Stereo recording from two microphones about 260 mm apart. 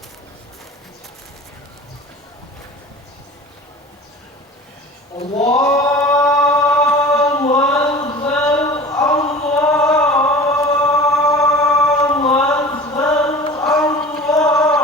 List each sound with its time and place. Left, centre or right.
5.4 s choir: centre
8.3 s a sound: centre
14.3 s chant: centre